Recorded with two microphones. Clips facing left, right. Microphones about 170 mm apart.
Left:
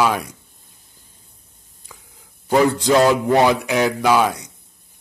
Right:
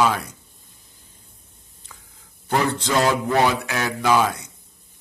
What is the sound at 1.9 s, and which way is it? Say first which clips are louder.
Whispering: left 3 dB; 15° left (ahead or behind).